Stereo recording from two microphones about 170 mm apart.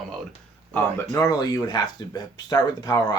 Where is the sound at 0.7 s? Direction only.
10° left (ahead or behind).